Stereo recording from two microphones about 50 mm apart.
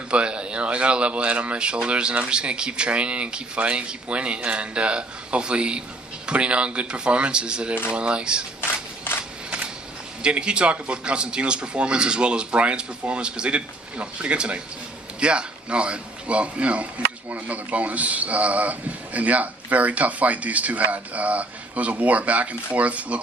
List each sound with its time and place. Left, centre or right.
0.1 s speech: right
9.1 s a sound: left
10.2 s speech: centre